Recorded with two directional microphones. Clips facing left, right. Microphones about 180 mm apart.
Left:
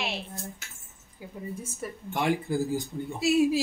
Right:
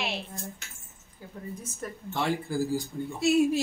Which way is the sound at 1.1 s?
10° left (ahead or behind).